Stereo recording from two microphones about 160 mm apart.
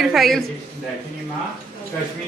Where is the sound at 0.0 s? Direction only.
Centre (ahead or behind).